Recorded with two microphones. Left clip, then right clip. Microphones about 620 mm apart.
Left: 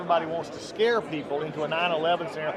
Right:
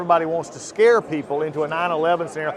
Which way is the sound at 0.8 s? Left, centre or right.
Right.